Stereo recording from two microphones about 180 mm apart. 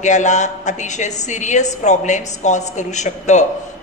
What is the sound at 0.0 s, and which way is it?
A woman's voice, 40° left (ahead or behind).